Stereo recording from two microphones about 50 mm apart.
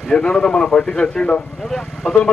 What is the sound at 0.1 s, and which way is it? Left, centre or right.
Speech, centre.